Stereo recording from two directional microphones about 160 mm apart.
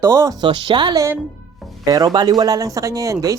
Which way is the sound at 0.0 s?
20° right (ahead or behind).